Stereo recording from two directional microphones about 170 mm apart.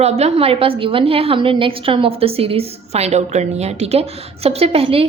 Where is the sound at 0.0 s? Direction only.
40° right (ahead or behind).